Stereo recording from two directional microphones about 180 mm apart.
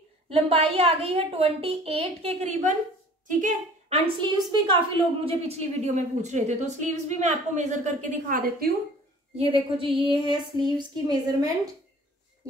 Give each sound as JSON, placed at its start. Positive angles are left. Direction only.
{"t": 0.3, "sound": "a woman's voice", "side_deg": -35}
{"t": 3.9, "sound": "a woman's voice", "side_deg": -25}
{"t": 9.5, "sound": "a sound", "side_deg": -30}